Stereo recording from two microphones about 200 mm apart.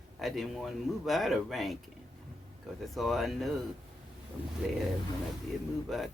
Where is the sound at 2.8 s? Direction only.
Centre (ahead or behind).